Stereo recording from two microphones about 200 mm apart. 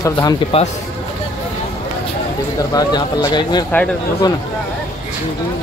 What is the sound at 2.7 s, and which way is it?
Speech, 20° left (ahead or behind).